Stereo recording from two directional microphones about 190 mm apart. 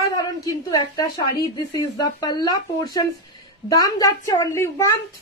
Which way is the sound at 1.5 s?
20° left (ahead or behind).